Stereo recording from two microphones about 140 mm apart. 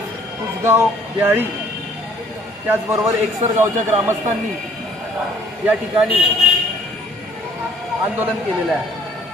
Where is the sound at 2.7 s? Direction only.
15° right (ahead or behind).